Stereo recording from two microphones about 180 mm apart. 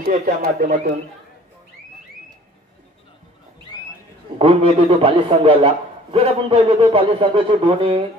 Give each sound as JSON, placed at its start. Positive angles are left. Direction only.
{"t": 0.0, "sound": "speech", "side_deg": -45}
{"t": 4.4, "sound": "a man's voice", "side_deg": -35}